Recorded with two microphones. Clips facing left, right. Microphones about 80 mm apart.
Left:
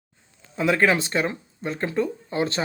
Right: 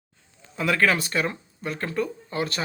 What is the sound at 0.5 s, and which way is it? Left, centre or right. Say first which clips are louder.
Speech: left 2 dB; left.